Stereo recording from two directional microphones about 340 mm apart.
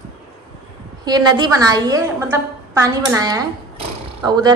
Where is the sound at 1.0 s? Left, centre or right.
Centre.